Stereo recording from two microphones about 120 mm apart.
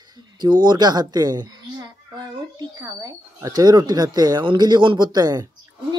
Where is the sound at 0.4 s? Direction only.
35° right (ahead or behind).